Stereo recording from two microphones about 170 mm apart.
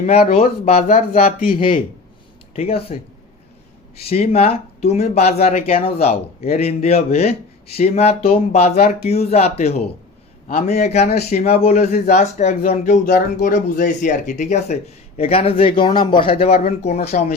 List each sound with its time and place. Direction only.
0.0 s speech: 40° left (ahead or behind)
1.5 s speech: 30° left (ahead or behind)
4.0 s speech: 35° left (ahead or behind)
13.1 s speech: 70° left (ahead or behind)
13.5 s speech: 45° left (ahead or behind); by 16.3 s 30° left (ahead or behind)
16.6 s speech: 40° left (ahead or behind)